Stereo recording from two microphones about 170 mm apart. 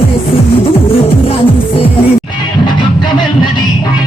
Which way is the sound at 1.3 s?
30° left (ahead or behind).